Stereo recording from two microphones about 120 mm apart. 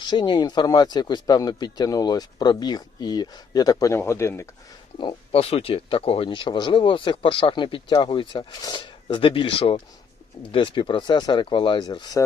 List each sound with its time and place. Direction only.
0.1 s speech: 40° left (ahead or behind); by 4.4 s 25° left (ahead or behind)
4.9 s speech: 50° left (ahead or behind)